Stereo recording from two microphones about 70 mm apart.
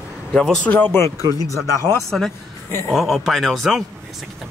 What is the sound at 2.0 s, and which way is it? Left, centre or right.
Speech, centre.